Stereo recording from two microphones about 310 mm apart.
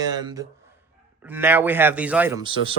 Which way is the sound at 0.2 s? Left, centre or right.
Centre.